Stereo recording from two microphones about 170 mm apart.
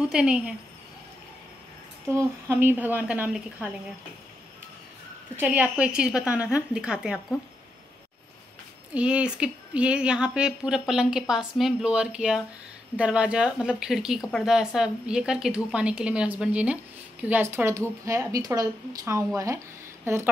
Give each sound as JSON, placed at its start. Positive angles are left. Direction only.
{"t": 0.1, "sound": "a woman's voice", "side_deg": -5}
{"t": 2.0, "sound": "a woman's voice", "side_deg": -15}
{"t": 5.4, "sound": "a woman's voice", "side_deg": -10}
{"t": 8.9, "sound": "a woman's voice", "side_deg": -5}